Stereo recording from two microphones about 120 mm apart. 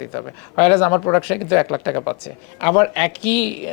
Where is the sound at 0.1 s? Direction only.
15° left (ahead or behind).